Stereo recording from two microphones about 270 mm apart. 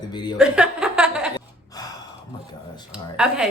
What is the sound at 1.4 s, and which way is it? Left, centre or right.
Gasp, centre.